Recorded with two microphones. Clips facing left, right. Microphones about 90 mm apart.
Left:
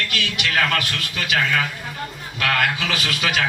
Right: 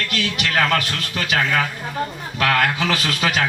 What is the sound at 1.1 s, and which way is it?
A man's voice, 35° right (ahead or behind).